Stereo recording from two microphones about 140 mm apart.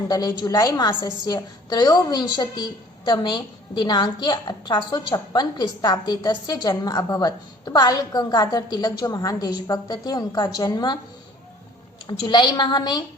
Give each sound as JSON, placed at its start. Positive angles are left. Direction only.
{"t": 0.1, "sound": "a woman's voice", "side_deg": 25}
{"t": 12.0, "sound": "a woman's voice", "side_deg": 30}